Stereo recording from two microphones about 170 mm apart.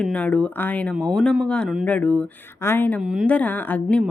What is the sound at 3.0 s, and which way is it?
Speech, 5° right (ahead or behind).